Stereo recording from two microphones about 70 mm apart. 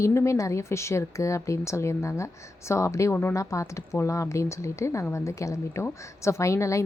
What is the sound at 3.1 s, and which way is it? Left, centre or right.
Speech, left.